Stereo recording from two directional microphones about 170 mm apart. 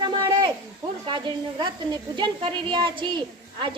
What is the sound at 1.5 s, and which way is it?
A woman's voice, 25° right (ahead or behind).